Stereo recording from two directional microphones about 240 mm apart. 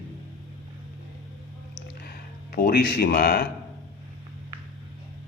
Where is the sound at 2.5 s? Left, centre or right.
Left.